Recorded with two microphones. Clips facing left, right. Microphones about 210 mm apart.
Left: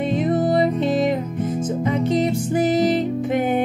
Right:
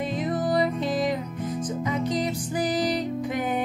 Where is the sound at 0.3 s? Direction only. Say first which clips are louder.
Left 5 dB; 25° left (ahead or behind).